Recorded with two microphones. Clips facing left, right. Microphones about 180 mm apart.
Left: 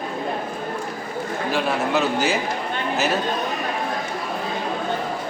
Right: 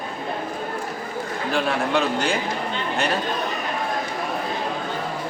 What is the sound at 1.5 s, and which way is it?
Speech, 5° left (ahead or behind).